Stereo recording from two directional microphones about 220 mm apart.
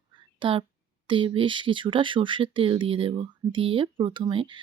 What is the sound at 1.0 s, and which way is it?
Speech, 25° right (ahead or behind).